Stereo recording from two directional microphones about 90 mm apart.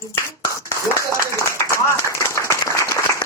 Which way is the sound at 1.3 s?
35° left (ahead or behind).